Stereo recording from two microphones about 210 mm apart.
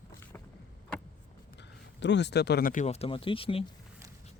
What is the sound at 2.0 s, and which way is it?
Speech, 55° left (ahead or behind).